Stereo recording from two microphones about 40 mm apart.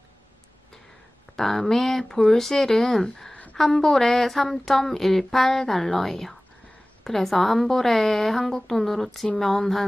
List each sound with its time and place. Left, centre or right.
1.3 s a woman's voice: centre